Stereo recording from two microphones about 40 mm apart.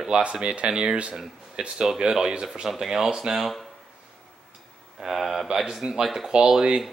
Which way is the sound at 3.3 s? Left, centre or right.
Centre.